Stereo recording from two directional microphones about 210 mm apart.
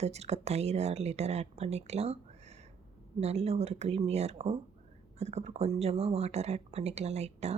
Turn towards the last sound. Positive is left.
turn(degrees=-30)  # may be behind; listen again after turning